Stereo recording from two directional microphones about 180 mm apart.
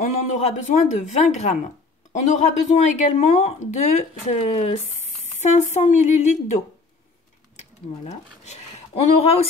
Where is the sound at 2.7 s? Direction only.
40° left (ahead or behind).